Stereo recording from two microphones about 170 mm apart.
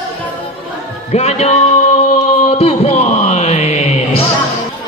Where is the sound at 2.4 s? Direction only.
35° left (ahead or behind).